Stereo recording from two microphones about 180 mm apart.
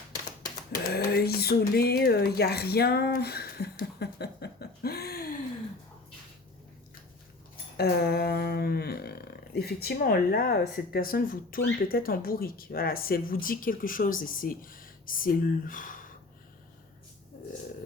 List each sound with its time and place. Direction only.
0.7 s speech: 60° left (ahead or behind)
7.8 s speech: 60° left (ahead or behind)